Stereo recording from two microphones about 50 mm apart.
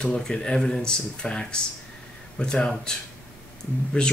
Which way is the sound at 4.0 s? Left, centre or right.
Left.